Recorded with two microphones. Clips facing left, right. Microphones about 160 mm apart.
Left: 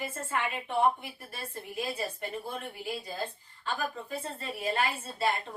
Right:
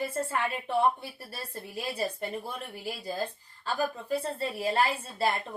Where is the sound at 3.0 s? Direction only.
35° right (ahead or behind).